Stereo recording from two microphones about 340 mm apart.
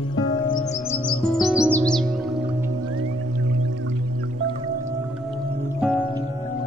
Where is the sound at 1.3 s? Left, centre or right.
Centre.